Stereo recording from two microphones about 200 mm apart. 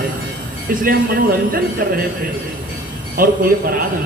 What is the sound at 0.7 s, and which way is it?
Speech, 45° right (ahead or behind).